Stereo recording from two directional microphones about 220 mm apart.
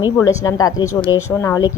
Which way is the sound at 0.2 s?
15° left (ahead or behind).